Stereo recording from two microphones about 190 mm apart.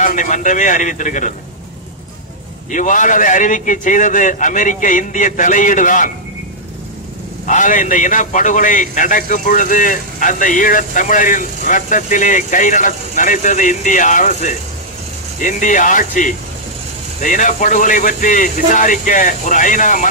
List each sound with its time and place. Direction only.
0.0 s a man's voice: 45° left (ahead or behind)
2.7 s a man's voice: 40° left (ahead or behind)
7.4 s a man's voice: 40° left (ahead or behind)